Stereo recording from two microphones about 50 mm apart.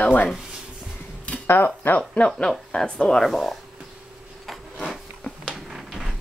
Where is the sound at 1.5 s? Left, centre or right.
Left.